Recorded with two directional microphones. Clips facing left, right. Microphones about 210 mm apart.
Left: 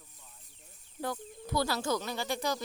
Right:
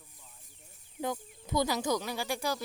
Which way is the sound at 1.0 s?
20° right (ahead or behind).